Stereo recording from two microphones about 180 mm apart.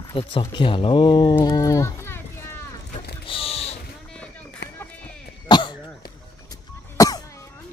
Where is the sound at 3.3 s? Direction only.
30° left (ahead or behind).